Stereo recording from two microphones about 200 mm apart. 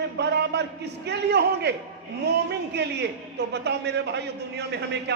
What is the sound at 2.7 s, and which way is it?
A man's voice, 55° right (ahead or behind).